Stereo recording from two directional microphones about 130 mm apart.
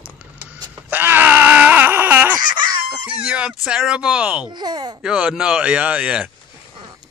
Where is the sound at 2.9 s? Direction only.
10° right (ahead or behind).